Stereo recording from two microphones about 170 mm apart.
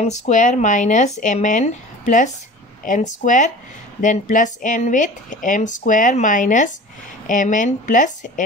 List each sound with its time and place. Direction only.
0.0 s speech: 45° left (ahead or behind)